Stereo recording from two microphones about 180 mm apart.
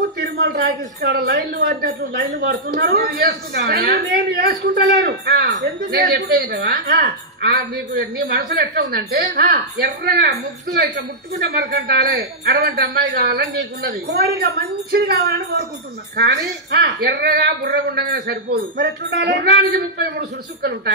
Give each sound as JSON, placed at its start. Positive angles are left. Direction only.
{"t": 0.2, "sound": "speech", "side_deg": -65}